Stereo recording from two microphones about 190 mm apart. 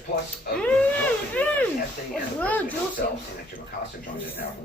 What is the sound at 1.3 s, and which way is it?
Speech, 10° left (ahead or behind).